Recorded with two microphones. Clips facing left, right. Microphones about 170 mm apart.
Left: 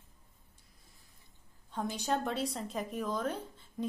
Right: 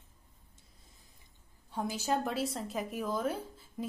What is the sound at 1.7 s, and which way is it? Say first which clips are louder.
A woman's voice: right 1 dB; 5° right (ahead or behind).